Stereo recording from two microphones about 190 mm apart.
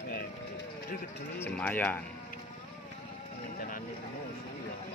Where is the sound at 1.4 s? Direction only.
10° left (ahead or behind).